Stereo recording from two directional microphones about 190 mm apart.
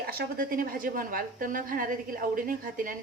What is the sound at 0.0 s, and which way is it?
A woman's voice, 55° right (ahead or behind).